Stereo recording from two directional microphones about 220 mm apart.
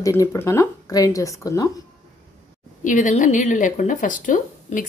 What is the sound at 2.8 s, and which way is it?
A woman's voice, 35° left (ahead or behind).